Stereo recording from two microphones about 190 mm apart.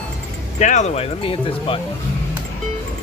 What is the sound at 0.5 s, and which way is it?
Speech, 40° left (ahead or behind).